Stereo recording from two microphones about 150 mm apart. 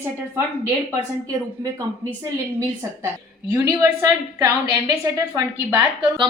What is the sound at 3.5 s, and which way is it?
A woman's voice, 20° right (ahead or behind).